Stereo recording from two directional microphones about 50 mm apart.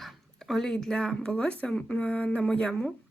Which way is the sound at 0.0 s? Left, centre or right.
Centre.